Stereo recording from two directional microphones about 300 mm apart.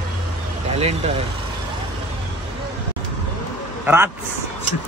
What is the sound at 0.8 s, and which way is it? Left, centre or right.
Speech, centre.